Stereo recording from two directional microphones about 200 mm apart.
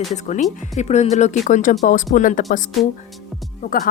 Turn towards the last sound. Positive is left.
turn(degrees=45)  # may be behind; listen again after turning